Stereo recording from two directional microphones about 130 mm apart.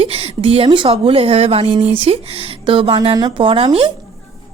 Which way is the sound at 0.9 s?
45° right (ahead or behind).